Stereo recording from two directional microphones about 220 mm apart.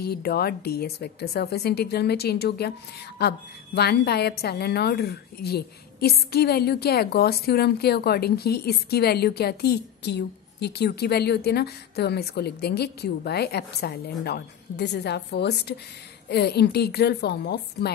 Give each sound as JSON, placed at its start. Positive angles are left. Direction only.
{"t": 0.0, "sound": "a woman's voice", "side_deg": 45}